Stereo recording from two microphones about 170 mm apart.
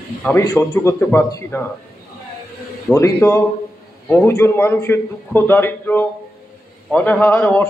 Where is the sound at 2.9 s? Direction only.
15° left (ahead or behind).